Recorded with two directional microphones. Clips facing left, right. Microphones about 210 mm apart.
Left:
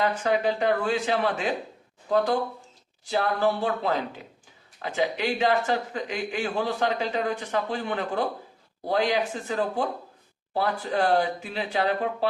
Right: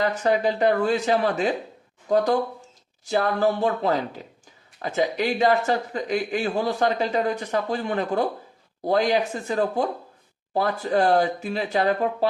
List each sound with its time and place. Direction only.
0.0 s speech: 40° right (ahead or behind)